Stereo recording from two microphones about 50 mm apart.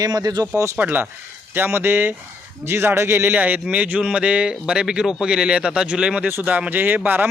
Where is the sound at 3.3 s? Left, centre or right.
Right.